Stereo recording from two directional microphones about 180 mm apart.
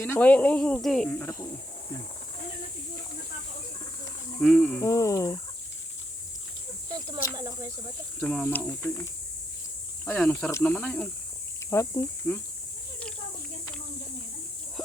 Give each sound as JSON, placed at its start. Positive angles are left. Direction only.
{"t": 0.0, "sound": "speech", "side_deg": 10}
{"t": 4.4, "sound": "speech", "side_deg": 0}
{"t": 4.8, "sound": "speech", "side_deg": 15}
{"t": 7.3, "sound": "speech", "side_deg": -20}
{"t": 8.2, "sound": "speech", "side_deg": 5}
{"t": 10.1, "sound": "speech", "side_deg": 10}